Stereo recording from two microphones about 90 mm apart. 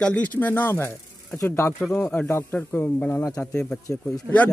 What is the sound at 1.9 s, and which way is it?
Speech, 10° left (ahead or behind).